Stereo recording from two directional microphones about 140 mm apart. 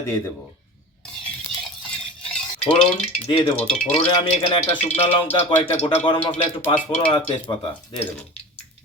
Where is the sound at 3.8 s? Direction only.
55° left (ahead or behind); by 8.0 s 35° left (ahead or behind).